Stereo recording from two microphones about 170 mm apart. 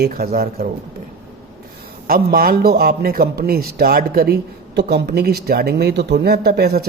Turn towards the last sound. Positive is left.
turn(degrees=-70)  # may be behind; listen again after turning